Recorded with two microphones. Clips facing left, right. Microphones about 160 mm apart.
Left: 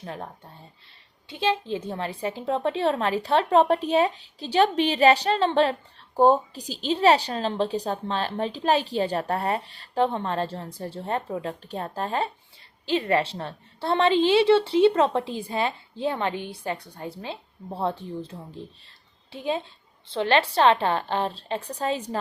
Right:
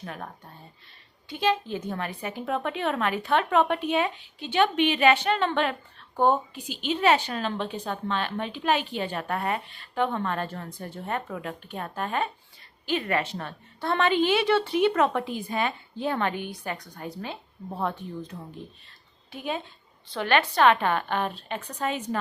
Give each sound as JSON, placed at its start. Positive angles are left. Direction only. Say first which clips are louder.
{"t": 0.0, "sound": "a woman's voice", "louder": "left 2 dB", "side_deg": 30}
{"t": 1.3, "sound": "a woman's voice", "louder": "even", "side_deg": 30}